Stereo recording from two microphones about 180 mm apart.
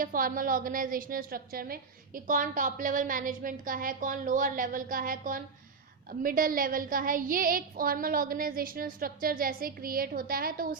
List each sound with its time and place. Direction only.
0.0 s a woman's voice: 50° right (ahead or behind)